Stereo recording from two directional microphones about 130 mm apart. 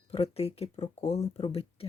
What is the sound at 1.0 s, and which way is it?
Speech, 60° left (ahead or behind).